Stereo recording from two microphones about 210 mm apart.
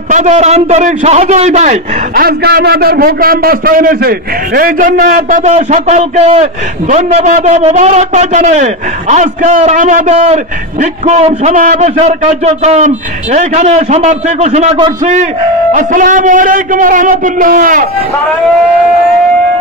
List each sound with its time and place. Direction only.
0.1 s a man's voice: 35° right (ahead or behind)